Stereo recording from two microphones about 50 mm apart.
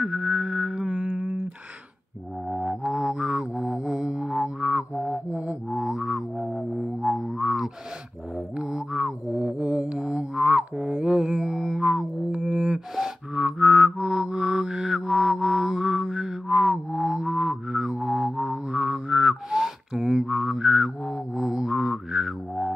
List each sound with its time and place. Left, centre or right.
0.0 s music: centre
1.0 s a sound: right
2.5 s music: centre
4.6 s music: right
5.7 s music: centre
6.3 s music: centre
8.4 s mantra: centre
10.5 s a sound: right; by 12.1 s centre
12.4 s music: centre